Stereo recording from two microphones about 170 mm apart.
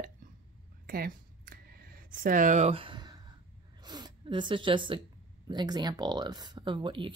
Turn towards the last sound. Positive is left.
turn(degrees=-30)  # may be behind; listen again after turning